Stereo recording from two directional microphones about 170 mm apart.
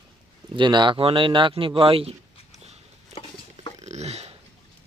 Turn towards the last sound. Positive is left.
turn(degrees=-40)  # may be behind; listen again after turning